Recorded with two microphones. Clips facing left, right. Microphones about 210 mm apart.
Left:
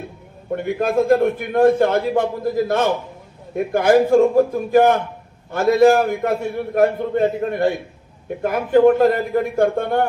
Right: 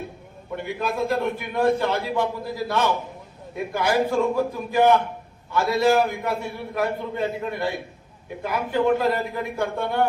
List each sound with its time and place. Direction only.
0.5 s a man's voice: 50° left (ahead or behind)